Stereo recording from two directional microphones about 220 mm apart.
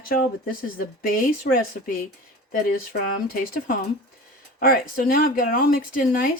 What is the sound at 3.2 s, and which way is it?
Speech, 40° left (ahead or behind).